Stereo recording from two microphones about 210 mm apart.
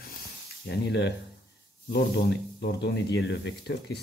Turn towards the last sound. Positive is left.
turn(degrees=55)  # may be behind; listen again after turning